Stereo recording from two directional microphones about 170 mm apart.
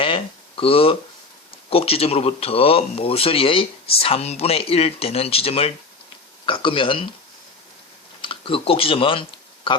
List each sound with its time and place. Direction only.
0.0 s a sound: 30° left (ahead or behind)
1.5 s speech: 35° left (ahead or behind)
8.2 s speech: 30° left (ahead or behind)